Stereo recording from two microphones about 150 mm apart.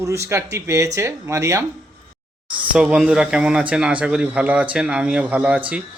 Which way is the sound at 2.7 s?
5° right (ahead or behind).